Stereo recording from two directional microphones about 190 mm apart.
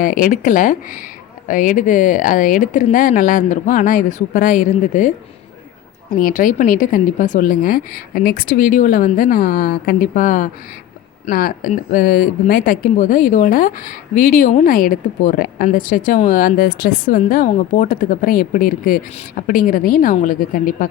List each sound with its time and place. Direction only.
0.0 s speech: 45° left (ahead or behind)
6.1 s speech: 45° left (ahead or behind)